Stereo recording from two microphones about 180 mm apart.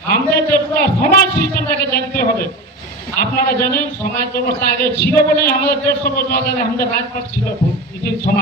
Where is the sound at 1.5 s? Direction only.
55° left (ahead or behind).